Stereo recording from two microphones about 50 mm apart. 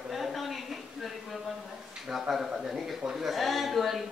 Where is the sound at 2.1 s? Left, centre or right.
Centre.